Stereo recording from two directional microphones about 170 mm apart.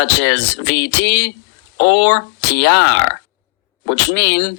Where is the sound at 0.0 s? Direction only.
90° left.